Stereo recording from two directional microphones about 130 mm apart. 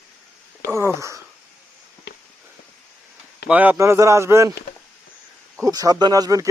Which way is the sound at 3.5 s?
10° right (ahead or behind).